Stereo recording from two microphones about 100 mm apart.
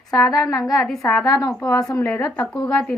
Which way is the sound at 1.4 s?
35° left (ahead or behind).